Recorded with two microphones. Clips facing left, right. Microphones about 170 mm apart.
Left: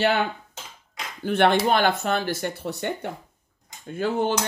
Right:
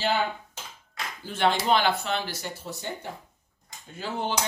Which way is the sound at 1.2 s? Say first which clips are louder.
Left 6 dB; 60° left (ahead or behind).